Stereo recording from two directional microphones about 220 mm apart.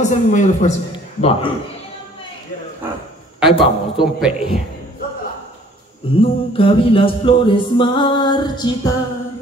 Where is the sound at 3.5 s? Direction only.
25° left (ahead or behind).